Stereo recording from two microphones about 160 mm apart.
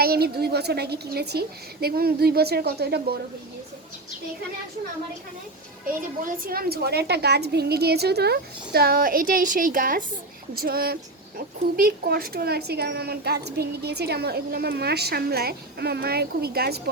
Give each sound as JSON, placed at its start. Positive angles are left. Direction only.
{"t": 0.0, "sound": "speech", "side_deg": -75}
{"t": 6.4, "sound": "a woman's voice", "side_deg": -70}
{"t": 10.5, "sound": "a woman's voice", "side_deg": -70}